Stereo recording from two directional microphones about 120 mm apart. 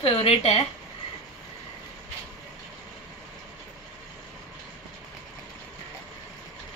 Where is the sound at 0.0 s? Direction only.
55° left (ahead or behind).